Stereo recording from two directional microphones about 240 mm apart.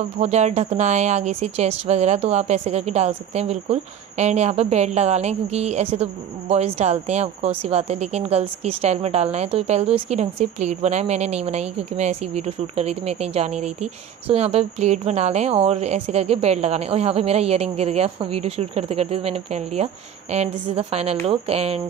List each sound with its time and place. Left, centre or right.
0.2 s speech: right